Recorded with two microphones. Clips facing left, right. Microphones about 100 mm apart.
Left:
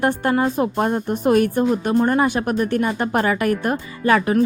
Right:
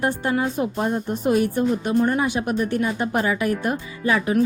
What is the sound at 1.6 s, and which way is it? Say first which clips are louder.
A woman's voice: left 2 dB; 40° left (ahead or behind).